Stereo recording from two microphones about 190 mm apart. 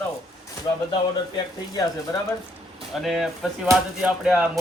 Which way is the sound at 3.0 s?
Centre (ahead or behind).